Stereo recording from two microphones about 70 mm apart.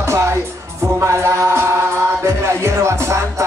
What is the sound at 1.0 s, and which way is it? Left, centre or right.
Music, right.